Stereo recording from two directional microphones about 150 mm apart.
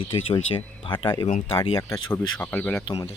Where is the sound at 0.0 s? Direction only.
35° left (ahead or behind).